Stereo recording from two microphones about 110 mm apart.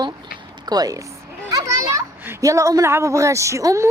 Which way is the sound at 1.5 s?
35° right (ahead or behind).